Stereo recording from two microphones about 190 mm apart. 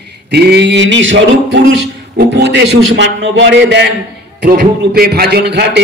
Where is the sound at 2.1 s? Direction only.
65° right (ahead or behind).